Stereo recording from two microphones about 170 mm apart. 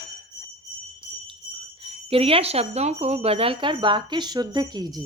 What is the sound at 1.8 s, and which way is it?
Speech, 35° right (ahead or behind).